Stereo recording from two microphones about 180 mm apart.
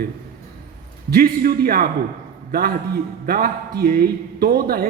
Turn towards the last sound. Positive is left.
turn(degrees=-55)  # may be behind; listen again after turning